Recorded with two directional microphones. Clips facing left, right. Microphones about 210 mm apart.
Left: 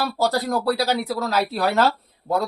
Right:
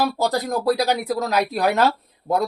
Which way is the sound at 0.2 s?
15° right (ahead or behind).